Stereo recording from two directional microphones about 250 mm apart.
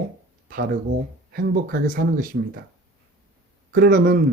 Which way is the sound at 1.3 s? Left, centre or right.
Right.